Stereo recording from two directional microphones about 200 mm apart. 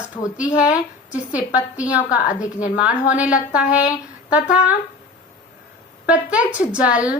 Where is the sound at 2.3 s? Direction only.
40° left (ahead or behind).